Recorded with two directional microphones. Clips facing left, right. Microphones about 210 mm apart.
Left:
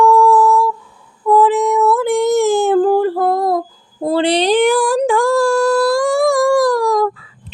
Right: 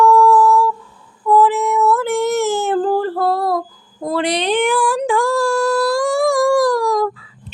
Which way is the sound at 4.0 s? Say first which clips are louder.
Left 4 dB; 30° left (ahead or behind).